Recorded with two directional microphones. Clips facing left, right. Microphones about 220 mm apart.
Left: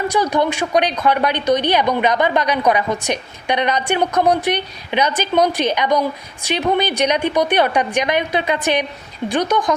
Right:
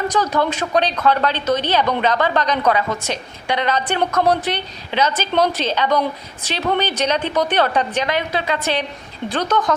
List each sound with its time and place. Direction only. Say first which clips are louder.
0.1 s a woman's voice: left 2 dB; 15° left (ahead or behind)